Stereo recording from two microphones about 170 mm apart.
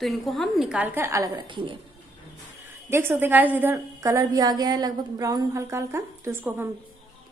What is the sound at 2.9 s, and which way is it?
A woman's voice, 15° right (ahead or behind).